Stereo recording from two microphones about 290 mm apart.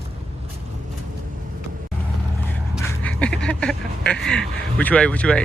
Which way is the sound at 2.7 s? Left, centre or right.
Centre.